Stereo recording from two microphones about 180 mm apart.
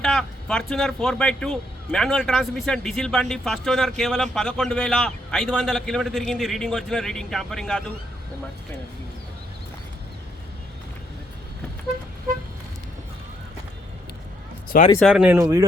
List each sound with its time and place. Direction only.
0.0 s speech: 5° left (ahead or behind)
14.9 s speech: centre (ahead or behind)
15.4 s a man's voice: 20° right (ahead or behind)